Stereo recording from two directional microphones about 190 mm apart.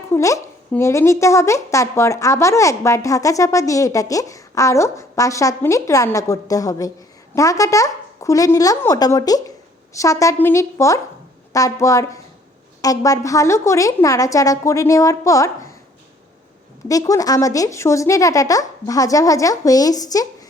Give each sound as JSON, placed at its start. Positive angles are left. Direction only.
{"t": 0.1, "sound": "a sound", "side_deg": 15}
{"t": 0.7, "sound": "a woman's voice", "side_deg": 15}
{"t": 16.9, "sound": "a woman's voice", "side_deg": 20}